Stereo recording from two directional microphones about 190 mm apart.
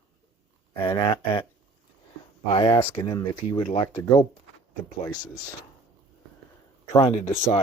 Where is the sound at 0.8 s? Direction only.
20° left (ahead or behind).